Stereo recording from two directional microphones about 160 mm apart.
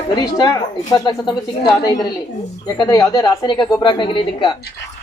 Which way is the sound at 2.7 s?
20° left (ahead or behind).